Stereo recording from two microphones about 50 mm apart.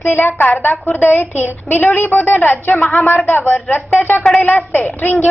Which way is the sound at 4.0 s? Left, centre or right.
Left.